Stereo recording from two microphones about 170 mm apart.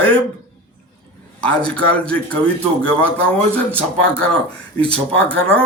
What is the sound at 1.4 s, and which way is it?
A man's voice, 5° left (ahead or behind).